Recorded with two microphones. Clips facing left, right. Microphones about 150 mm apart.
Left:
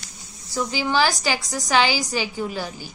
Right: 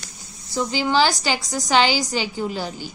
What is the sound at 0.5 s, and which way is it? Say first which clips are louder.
A woman's voice: right 2 dB; 20° right (ahead or behind).